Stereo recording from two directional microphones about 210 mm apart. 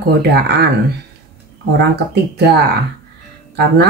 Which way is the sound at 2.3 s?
50° right (ahead or behind).